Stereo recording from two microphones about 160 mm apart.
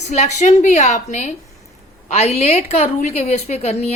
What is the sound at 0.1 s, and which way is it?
A woman's voice, 45° left (ahead or behind).